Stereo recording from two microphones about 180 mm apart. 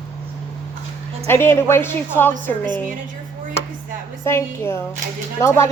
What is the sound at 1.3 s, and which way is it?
A woman's voice, 15° left (ahead or behind).